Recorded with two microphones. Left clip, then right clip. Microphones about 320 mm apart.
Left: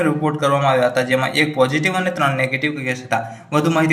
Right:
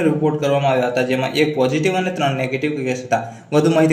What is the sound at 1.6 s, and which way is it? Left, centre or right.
A man's voice, centre.